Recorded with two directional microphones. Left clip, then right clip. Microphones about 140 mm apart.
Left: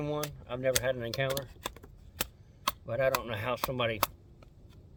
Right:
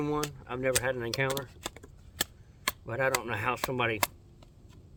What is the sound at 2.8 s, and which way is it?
Speech, 40° right (ahead or behind).